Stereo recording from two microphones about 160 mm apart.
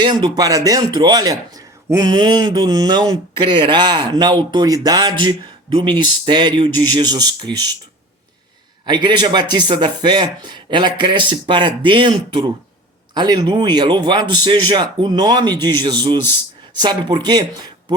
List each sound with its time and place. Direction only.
0.0 s speech: 30° right (ahead or behind)
8.9 s speech: 25° right (ahead or behind)